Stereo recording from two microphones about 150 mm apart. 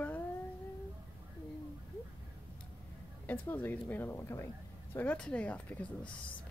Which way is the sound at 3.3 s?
10° left (ahead or behind).